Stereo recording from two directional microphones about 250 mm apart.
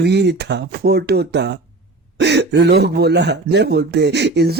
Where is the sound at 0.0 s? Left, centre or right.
Right.